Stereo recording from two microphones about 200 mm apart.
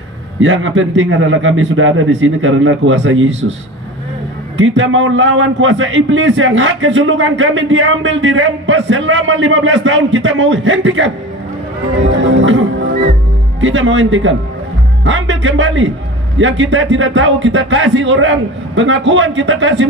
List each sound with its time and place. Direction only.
0.4 s a man's voice: 75° right (ahead or behind)
4.6 s a man's voice: 75° right (ahead or behind)
12.2 s music: 75° right (ahead or behind)
13.6 s a man's voice: 70° right (ahead or behind)